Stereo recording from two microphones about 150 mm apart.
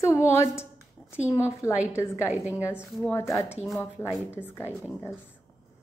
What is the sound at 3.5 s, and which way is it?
Speech, 10° right (ahead or behind).